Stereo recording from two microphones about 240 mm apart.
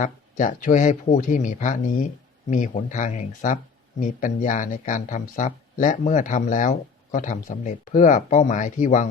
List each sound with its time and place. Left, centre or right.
0.0 s speech: left